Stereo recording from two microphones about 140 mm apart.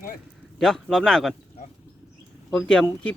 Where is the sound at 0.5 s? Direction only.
5° left (ahead or behind).